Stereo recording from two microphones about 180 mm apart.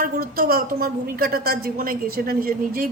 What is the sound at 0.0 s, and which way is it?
A man's voice, 55° right (ahead or behind).